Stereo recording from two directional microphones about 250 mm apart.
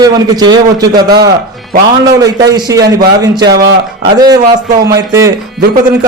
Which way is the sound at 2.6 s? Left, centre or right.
Centre.